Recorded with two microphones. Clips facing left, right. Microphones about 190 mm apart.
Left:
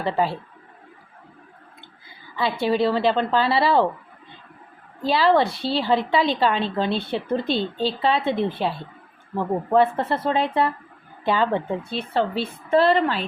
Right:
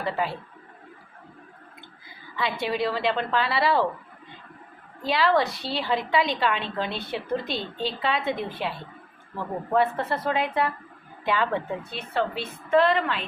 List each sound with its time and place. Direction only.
0.0 s a woman's voice: 30° left (ahead or behind)
2.3 s a woman's voice: 30° left (ahead or behind)
5.0 s a woman's voice: 30° left (ahead or behind)
9.7 s a woman's voice: 30° left (ahead or behind)